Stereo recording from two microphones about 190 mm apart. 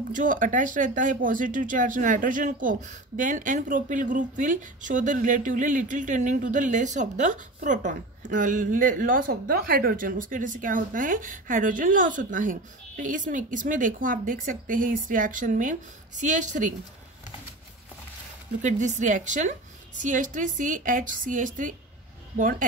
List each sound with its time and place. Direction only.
0.1 s speech: 45° right (ahead or behind)
18.6 s a woman's voice: 40° right (ahead or behind)